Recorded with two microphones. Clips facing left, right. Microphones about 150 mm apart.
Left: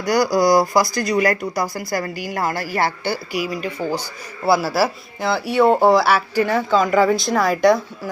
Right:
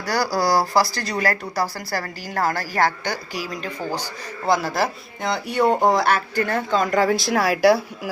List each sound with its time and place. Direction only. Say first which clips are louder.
0.0 s speech: left 5 dB; 15° left (ahead or behind)
4.4 s speech: left 3 dB; 5° left (ahead or behind)